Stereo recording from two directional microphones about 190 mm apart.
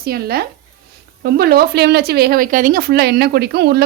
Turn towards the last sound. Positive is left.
turn(degrees=-60)  # may be behind; listen again after turning